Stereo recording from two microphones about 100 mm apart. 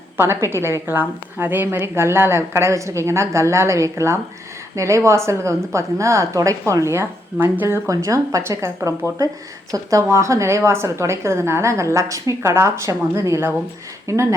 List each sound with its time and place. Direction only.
0.2 s a woman's voice: 25° right (ahead or behind)
7.9 s a woman's voice: 30° right (ahead or behind)